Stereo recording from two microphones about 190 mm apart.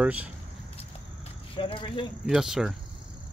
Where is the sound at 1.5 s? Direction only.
25° left (ahead or behind).